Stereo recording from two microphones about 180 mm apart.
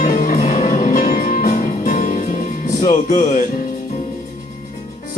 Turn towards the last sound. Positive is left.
turn(degrees=45)  # may be behind; listen again after turning